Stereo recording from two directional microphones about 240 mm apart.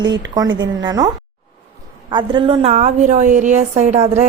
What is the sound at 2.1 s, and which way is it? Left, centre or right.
Speech, centre.